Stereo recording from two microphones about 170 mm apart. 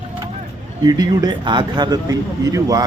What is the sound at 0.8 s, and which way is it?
Speech, 25° right (ahead or behind).